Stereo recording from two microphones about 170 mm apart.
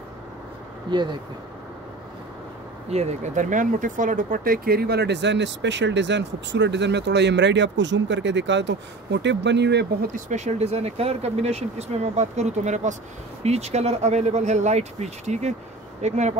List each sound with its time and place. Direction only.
0.9 s speech: 25° right (ahead or behind)
2.9 s speech: 40° right (ahead or behind); by 9.8 s 85° right
10.1 s speech: 40° right (ahead or behind)